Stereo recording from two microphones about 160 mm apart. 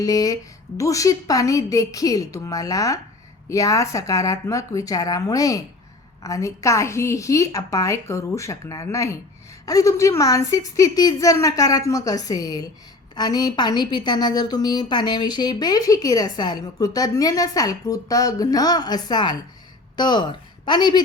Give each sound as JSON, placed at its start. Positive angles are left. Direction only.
{"t": 0.0, "sound": "a woman's voice", "side_deg": 25}